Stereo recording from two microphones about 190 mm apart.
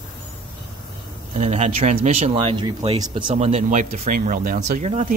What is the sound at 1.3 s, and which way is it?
Speech, 40° right (ahead or behind).